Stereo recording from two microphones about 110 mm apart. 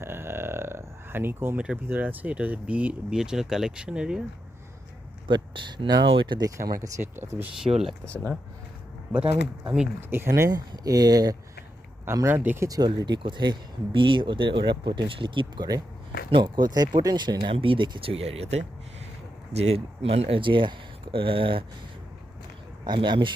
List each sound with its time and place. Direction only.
0.0 s a sound: 20° right (ahead or behind)
1.9 s speech: 15° right (ahead or behind)
5.3 s speech: 45° right (ahead or behind)
6.7 s speech: 25° right (ahead or behind)
8.0 s speech: 10° left (ahead or behind)
10.1 s speech: 25° right (ahead or behind)
12.0 s speech: 25° right (ahead or behind)
12.6 s speech: 35° right (ahead or behind)
18.1 s speech: 70° right (ahead or behind); by 21.6 s 55° right (ahead or behind)
22.8 s speech: 45° right (ahead or behind)